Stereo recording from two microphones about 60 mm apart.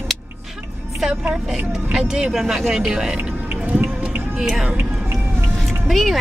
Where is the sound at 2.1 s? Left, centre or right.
Centre.